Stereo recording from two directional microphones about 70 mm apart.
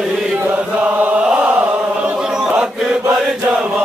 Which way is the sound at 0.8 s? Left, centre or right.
Right.